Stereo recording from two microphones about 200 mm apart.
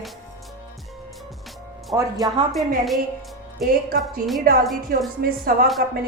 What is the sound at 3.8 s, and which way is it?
A woman's voice, 45° right (ahead or behind).